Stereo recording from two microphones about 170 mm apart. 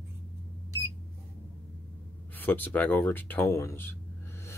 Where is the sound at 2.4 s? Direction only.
10° left (ahead or behind).